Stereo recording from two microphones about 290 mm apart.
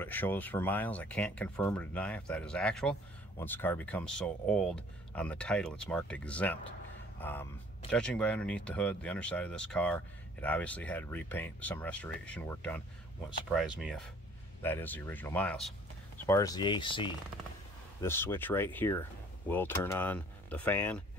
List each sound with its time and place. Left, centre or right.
0.0 s speech: centre